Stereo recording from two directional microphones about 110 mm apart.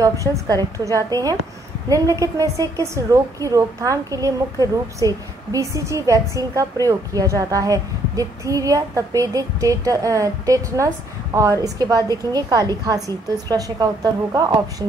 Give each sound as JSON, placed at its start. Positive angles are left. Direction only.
{"t": 0.0, "sound": "a woman's voice", "side_deg": -30}